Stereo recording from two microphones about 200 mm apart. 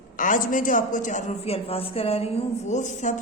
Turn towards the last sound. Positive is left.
turn(degrees=35)  # may be behind; listen again after turning